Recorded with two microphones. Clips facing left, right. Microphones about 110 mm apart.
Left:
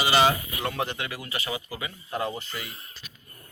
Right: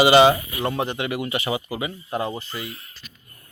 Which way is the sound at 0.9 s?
60° right (ahead or behind).